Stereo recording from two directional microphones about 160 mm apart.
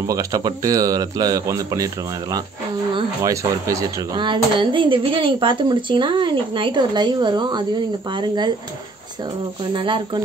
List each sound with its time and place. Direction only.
0.0 s speech: 20° right (ahead or behind)
3.2 s speech: 20° right (ahead or behind)
9.8 s speech: 30° right (ahead or behind)